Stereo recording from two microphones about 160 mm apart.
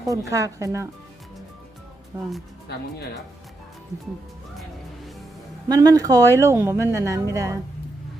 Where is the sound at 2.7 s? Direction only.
90° left.